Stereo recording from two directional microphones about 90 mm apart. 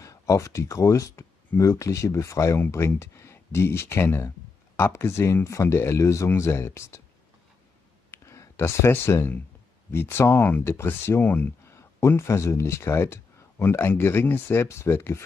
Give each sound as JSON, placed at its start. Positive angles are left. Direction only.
{"t": 0.0, "sound": "speech", "side_deg": 40}
{"t": 8.1, "sound": "a sound", "side_deg": 30}
{"t": 9.8, "sound": "speech", "side_deg": 25}